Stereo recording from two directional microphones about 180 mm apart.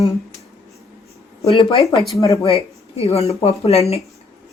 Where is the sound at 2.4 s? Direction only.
35° left (ahead or behind).